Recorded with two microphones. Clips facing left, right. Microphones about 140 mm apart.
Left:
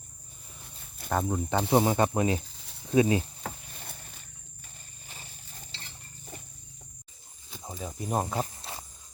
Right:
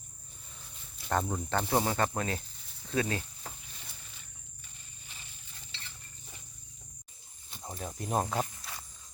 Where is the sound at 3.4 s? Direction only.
55° left (ahead or behind).